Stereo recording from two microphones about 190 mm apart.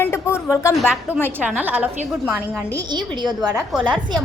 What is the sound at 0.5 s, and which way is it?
Speech, 15° left (ahead or behind).